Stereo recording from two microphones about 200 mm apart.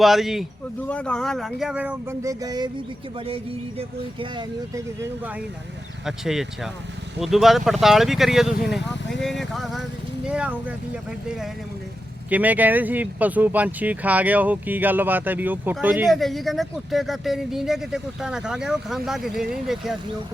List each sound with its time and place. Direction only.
0.0 s speech: centre (ahead or behind); by 4.8 s 25° right (ahead or behind)
6.1 s speech: centre (ahead or behind)
12.3 s speech: 10° right (ahead or behind)